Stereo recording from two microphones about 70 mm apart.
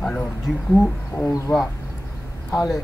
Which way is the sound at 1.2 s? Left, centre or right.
Left.